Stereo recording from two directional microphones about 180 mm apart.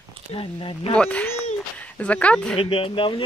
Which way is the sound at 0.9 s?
5° left (ahead or behind).